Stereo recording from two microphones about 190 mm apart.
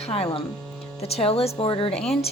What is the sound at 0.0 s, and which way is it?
A woman's voice, 30° left (ahead or behind).